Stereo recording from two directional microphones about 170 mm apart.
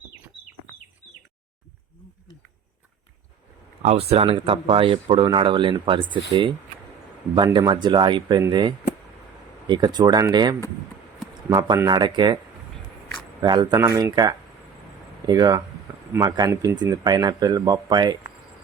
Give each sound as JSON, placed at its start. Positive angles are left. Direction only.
{"t": 3.8, "sound": "speech", "side_deg": -35}
{"t": 7.3, "sound": "speech", "side_deg": -25}
{"t": 13.4, "sound": "speech", "side_deg": -25}